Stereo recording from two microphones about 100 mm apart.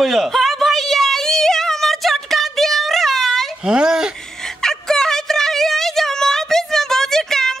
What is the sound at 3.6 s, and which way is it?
Speech, 10° right (ahead or behind).